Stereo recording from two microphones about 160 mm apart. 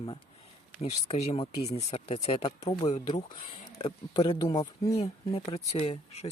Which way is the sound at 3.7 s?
30° left (ahead or behind).